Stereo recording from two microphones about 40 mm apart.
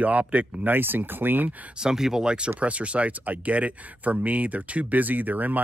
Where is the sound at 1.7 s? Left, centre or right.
Centre.